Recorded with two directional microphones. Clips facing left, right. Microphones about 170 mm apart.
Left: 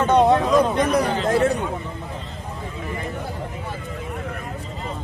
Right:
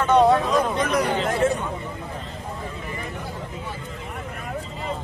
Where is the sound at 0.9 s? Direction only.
30° left (ahead or behind).